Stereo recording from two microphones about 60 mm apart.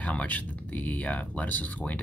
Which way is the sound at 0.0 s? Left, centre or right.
Left.